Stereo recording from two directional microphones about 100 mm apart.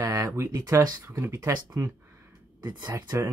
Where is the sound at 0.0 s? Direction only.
30° right (ahead or behind).